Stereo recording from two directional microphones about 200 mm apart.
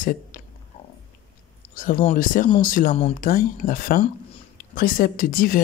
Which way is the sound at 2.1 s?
45° left (ahead or behind).